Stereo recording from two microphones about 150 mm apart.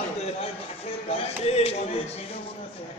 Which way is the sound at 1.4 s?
45° left (ahead or behind).